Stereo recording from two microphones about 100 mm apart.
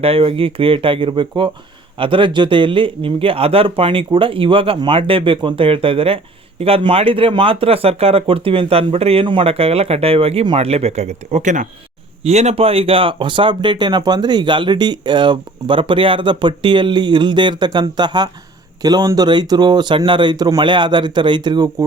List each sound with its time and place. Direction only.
0.0 s a man's voice: 70° right (ahead or behind)
10.6 s speech: 90° right; by 20.6 s 40° right (ahead or behind)
20.6 s speech: 50° right (ahead or behind)